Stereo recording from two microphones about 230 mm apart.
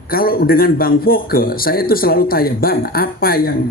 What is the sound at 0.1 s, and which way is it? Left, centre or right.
A man's voice, left.